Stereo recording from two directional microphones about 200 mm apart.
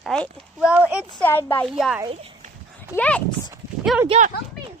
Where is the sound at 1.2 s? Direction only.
10° left (ahead or behind).